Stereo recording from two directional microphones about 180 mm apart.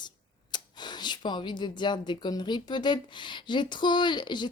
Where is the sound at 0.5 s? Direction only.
25° left (ahead or behind).